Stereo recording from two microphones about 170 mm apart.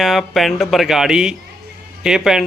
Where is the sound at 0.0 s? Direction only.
Centre (ahead or behind).